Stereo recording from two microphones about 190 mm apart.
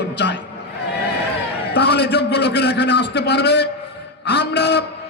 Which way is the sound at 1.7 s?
60° left (ahead or behind).